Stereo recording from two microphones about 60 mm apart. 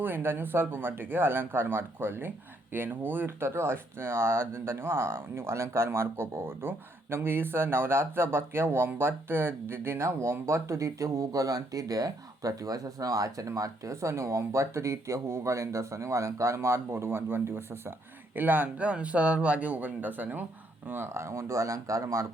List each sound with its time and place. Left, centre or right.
0.0 s speech: right
18.3 s speech: right